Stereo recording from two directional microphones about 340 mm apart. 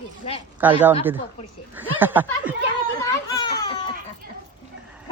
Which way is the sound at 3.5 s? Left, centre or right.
Centre.